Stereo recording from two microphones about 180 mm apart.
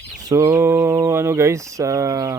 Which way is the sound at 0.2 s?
20° right (ahead or behind).